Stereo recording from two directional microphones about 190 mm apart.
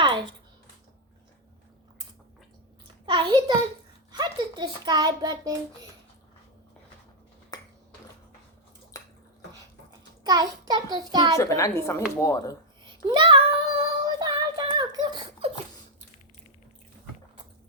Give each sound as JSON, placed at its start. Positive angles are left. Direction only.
{"t": 0.0, "sound": "a sound", "side_deg": -25}
{"t": 2.8, "sound": "a sound", "side_deg": -25}
{"t": 4.1, "sound": "a child's voice", "side_deg": -20}
{"t": 7.5, "sound": "ping", "side_deg": 20}
{"t": 8.9, "sound": "finger snapping", "side_deg": 15}
{"t": 10.2, "sound": "a child's voice", "side_deg": -20}
{"t": 11.3, "sound": "a woman's voice", "side_deg": 15}
{"t": 12.8, "sound": "a child's voice", "side_deg": -25}
{"t": 14.0, "sound": "child singing", "side_deg": -20}